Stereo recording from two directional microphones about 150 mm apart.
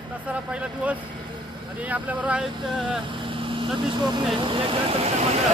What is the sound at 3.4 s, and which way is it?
Vehicle, 35° right (ahead or behind).